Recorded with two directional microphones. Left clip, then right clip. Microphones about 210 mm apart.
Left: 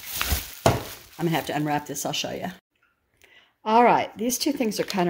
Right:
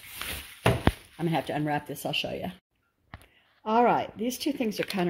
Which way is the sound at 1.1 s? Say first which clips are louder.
Left 3 dB; centre (ahead or behind).